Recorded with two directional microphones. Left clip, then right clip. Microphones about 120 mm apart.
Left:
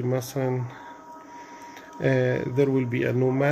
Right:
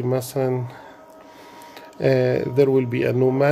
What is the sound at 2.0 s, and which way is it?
Speech, 35° right (ahead or behind).